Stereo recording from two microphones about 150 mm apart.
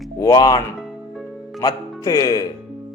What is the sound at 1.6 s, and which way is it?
Speech, 25° left (ahead or behind).